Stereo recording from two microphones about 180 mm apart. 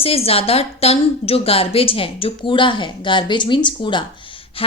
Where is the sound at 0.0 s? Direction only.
35° left (ahead or behind).